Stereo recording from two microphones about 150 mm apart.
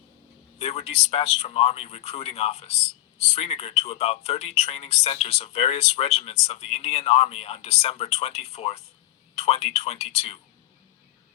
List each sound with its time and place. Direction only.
0.6 s speech: 45° left (ahead or behind)